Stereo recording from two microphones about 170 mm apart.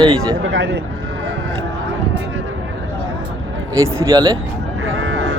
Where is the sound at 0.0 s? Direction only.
25° right (ahead or behind).